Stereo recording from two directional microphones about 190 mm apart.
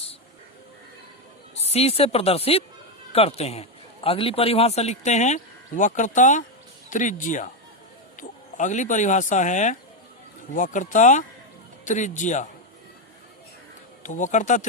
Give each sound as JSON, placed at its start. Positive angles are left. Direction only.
{"t": 1.6, "sound": "a man's voice", "side_deg": 35}
{"t": 14.0, "sound": "speech", "side_deg": 40}